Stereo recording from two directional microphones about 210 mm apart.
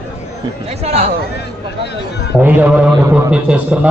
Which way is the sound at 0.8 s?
30° right (ahead or behind).